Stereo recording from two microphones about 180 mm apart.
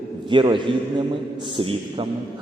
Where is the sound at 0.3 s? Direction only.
25° right (ahead or behind).